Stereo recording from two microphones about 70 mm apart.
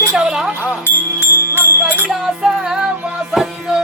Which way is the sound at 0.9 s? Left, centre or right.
Right.